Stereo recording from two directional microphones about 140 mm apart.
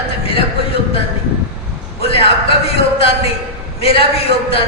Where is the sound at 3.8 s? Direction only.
45° left (ahead or behind).